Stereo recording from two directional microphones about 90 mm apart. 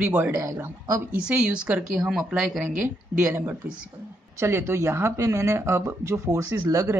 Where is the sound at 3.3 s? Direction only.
20° right (ahead or behind).